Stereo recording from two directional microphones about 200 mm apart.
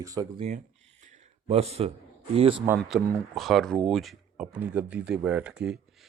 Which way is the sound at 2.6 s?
10° right (ahead or behind).